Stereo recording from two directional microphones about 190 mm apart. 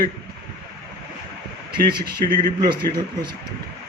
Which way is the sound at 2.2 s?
25° right (ahead or behind).